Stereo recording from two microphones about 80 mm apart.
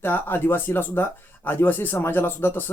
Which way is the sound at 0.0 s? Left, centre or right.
Left.